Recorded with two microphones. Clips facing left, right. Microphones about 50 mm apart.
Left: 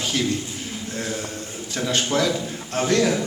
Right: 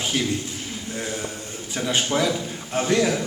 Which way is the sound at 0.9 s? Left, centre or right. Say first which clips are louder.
Left 1 dB; centre.